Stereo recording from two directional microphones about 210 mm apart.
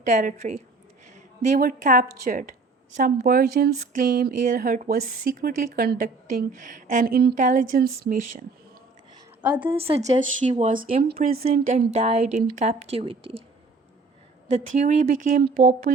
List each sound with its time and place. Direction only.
0.0 s speech: 40° right (ahead or behind)
9.6 s speech: 25° right (ahead or behind)
14.5 s speech: 35° right (ahead or behind)